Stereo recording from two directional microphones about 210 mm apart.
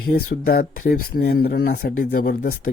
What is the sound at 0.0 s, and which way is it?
Speech, 50° left (ahead or behind).